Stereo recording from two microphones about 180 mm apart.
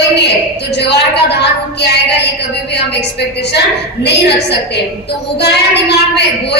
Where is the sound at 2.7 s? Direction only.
65° left (ahead or behind).